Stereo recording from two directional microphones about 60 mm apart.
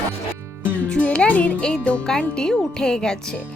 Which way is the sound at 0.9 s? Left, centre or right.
Centre.